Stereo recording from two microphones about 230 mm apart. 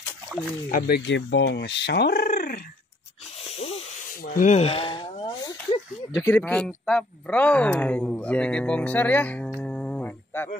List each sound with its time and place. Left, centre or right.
0.3 s speech: centre
0.7 s speech: left
3.5 s hiss: left
4.2 s speech: left; by 9.5 s centre
9.6 s a sound: centre